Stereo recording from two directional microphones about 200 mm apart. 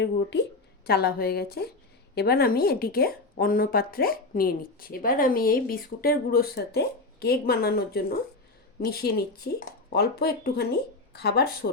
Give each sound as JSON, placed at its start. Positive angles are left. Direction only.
{"t": 0.0, "sound": "a woman's voice", "side_deg": 60}